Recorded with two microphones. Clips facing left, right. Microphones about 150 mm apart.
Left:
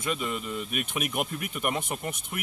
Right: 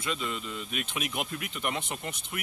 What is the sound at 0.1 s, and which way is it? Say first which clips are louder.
Speech: left 3 dB; 10° left (ahead or behind).